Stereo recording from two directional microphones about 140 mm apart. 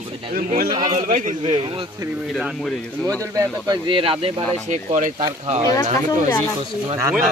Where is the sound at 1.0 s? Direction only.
65° right (ahead or behind).